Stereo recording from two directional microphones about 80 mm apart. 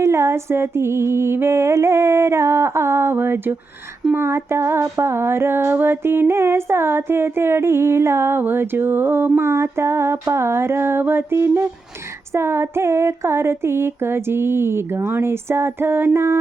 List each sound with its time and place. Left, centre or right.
0.0 s female singing: right